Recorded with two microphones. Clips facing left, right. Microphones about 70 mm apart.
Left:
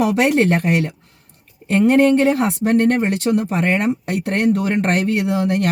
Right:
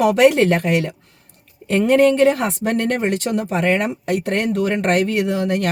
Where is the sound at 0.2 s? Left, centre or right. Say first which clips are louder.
Right 2 dB; left.